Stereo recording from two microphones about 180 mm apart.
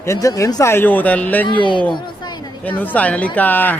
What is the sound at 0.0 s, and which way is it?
Speech, 15° left (ahead or behind).